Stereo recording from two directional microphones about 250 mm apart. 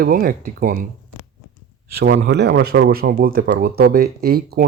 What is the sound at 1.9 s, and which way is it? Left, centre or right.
Speech, right.